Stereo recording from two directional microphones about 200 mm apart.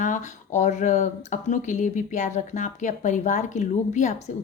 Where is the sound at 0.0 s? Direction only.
35° left (ahead or behind).